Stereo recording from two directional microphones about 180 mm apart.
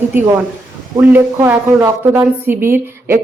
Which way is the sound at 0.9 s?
15° right (ahead or behind).